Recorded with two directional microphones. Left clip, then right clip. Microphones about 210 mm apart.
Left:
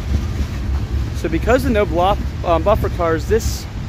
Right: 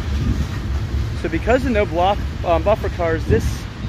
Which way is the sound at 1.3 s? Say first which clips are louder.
Left 2 dB; 15° left (ahead or behind).